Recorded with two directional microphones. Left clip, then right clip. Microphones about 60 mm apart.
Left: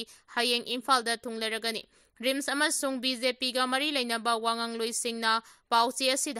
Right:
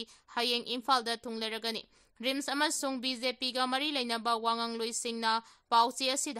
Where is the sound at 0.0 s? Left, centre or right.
Left.